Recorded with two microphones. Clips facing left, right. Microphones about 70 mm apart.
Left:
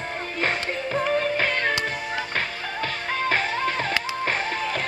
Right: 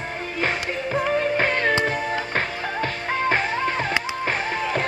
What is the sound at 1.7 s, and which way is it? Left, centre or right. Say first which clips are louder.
Music: right 5 dB; right.